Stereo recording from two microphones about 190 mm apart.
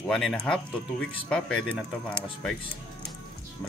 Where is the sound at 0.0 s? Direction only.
5° left (ahead or behind).